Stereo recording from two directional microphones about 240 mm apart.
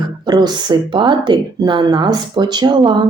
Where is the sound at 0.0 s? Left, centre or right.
Centre.